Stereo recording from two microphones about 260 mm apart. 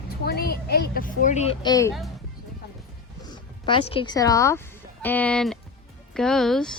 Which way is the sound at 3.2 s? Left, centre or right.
Centre.